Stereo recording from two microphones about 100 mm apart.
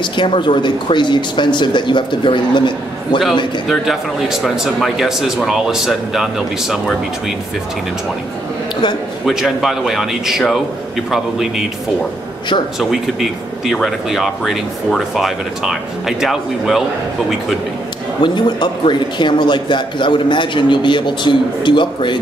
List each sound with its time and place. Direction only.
0.0 s a man's voice: 55° left (ahead or behind)
3.6 s speech: centre (ahead or behind)
9.2 s speech: 5° right (ahead or behind)
12.7 s speech: 5° right (ahead or behind)
18.2 s a man's voice: 50° left (ahead or behind)